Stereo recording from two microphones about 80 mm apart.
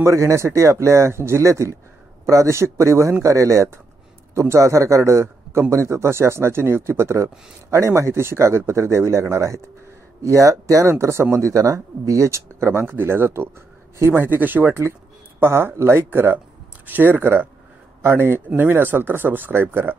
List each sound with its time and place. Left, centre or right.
0.0 s speech: right